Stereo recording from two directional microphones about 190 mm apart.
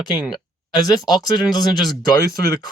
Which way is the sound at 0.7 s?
20° left (ahead or behind).